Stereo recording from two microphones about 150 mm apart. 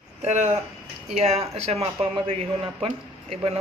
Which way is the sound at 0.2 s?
55° right (ahead or behind).